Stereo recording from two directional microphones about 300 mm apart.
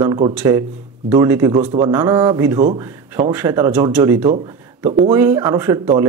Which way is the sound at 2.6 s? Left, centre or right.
Right.